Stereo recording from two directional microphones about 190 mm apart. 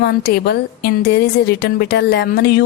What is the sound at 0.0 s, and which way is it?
A woman's voice, 55° left (ahead or behind).